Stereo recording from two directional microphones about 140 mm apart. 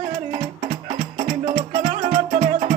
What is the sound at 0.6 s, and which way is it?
Music, 70° right (ahead or behind).